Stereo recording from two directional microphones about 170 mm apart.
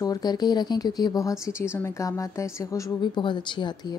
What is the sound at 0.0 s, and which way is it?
A woman's voice, 25° left (ahead or behind).